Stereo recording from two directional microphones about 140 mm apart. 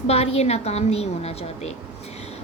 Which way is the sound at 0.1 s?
45° left (ahead or behind).